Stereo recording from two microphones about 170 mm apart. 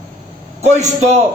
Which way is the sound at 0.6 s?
40° right (ahead or behind).